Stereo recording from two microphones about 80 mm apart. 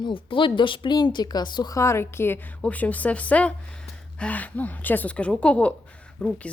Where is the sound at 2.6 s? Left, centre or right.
Centre.